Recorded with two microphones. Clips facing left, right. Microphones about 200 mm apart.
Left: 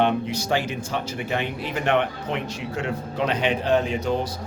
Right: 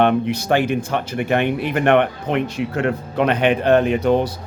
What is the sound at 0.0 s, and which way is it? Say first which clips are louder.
Speech: right 5 dB; 60° right (ahead or behind).